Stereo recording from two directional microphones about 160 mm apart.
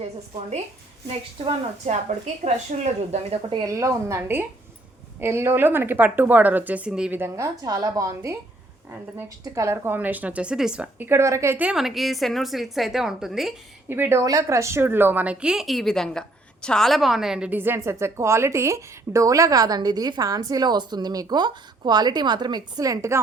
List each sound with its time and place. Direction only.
1.9 s a woman's voice: 45° right (ahead or behind)
3.5 s a woman's voice: 20° right (ahead or behind)
9.4 s a woman's voice: 15° right (ahead or behind); by 13.5 s centre (ahead or behind)
13.8 s a woman's voice: 15° right (ahead or behind)